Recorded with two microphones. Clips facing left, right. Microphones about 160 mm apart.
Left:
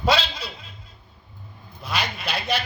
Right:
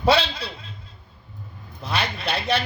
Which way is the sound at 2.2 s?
60° right (ahead or behind).